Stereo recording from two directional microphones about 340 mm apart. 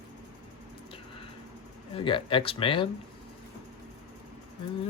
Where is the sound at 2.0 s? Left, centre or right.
Centre.